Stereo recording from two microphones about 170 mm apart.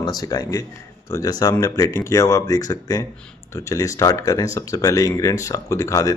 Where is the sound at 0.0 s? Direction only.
25° left (ahead or behind).